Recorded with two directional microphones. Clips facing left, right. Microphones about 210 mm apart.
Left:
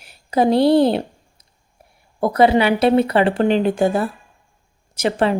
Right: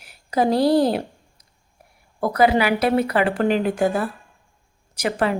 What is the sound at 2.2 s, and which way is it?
A woman's voice, 25° left (ahead or behind).